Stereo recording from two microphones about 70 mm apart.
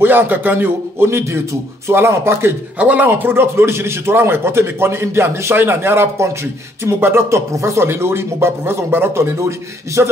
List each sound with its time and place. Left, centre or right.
0.0 s a man's voice: right
2.8 s a man's voice: right